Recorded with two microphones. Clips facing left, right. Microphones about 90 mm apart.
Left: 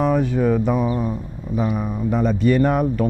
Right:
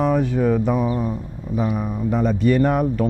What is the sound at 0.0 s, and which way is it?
Speech, 20° left (ahead or behind).